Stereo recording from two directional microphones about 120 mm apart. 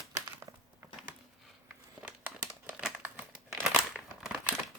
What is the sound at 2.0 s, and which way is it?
Crumpling, 15° right (ahead or behind).